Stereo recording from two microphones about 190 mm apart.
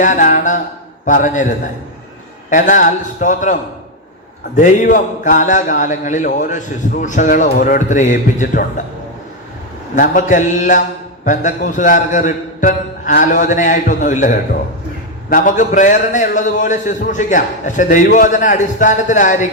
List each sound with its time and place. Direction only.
0.0 s a man's voice: 40° left (ahead or behind)
9.9 s a man's voice: 40° left (ahead or behind)